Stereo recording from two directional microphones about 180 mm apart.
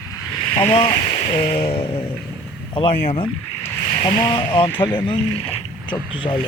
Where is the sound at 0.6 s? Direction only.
30° left (ahead or behind).